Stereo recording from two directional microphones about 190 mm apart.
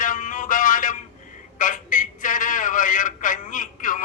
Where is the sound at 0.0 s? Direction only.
45° left (ahead or behind).